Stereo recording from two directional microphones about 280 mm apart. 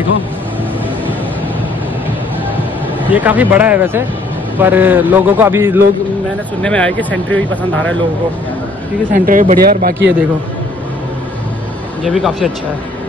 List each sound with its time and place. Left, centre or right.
3.1 s speech: centre
6.6 s speech: centre
9.1 s speech: right
12.0 s speech: centre